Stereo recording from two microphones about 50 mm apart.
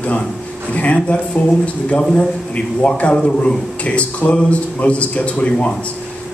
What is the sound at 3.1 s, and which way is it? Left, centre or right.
A man's voice, centre.